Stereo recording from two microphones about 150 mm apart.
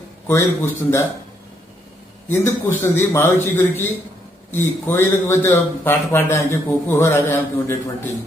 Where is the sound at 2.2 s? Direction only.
15° left (ahead or behind).